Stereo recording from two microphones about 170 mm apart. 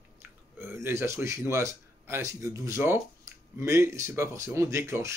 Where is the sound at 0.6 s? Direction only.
15° right (ahead or behind).